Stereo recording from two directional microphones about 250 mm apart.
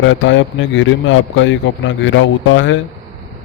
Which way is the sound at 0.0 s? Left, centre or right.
Left.